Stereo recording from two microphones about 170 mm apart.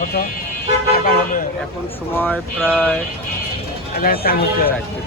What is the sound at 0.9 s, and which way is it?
Vehicle, 60° left (ahead or behind).